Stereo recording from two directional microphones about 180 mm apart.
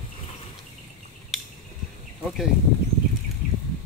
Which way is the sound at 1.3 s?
Centre (ahead or behind).